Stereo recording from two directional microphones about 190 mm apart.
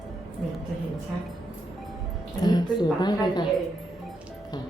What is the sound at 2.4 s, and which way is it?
A woman's voice, 25° left (ahead or behind).